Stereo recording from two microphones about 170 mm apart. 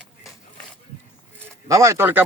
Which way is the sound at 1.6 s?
20° right (ahead or behind).